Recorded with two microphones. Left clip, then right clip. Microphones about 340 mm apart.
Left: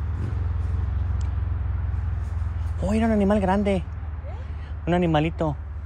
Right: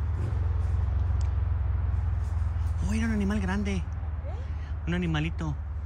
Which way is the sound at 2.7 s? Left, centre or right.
Centre.